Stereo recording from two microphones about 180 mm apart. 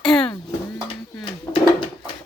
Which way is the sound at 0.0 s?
Centre (ahead or behind).